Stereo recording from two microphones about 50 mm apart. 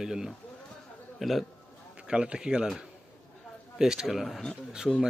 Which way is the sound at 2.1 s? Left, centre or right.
Centre.